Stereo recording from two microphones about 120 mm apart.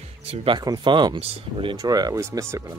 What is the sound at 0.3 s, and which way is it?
Speech, 55° right (ahead or behind).